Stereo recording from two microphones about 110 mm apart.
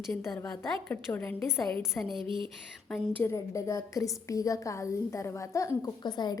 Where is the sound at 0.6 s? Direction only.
15° left (ahead or behind).